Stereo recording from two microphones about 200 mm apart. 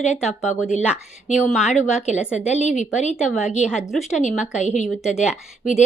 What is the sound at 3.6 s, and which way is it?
Speech, 5° right (ahead or behind).